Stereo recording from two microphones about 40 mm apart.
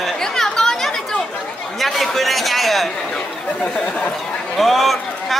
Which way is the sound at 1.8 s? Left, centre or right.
Centre.